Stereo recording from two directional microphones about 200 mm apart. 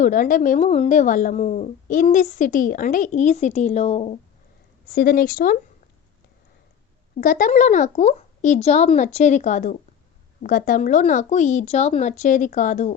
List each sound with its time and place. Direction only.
0.0 s speech: 40° left (ahead or behind)
4.9 s speech: 45° left (ahead or behind)
7.2 s speech: 45° left (ahead or behind)